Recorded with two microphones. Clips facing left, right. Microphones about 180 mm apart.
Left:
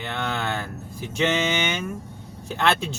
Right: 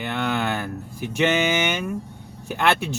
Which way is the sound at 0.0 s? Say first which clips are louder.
Right 4 dB; 15° right (ahead or behind).